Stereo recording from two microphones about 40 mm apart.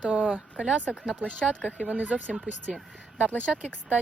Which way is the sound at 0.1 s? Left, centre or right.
Right.